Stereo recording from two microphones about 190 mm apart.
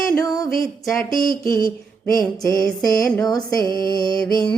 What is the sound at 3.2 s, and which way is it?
Music, 20° left (ahead or behind).